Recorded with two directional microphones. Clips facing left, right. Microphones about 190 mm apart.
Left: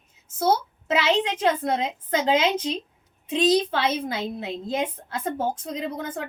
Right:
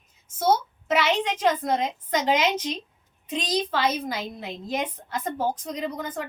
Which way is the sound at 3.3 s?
30° left (ahead or behind).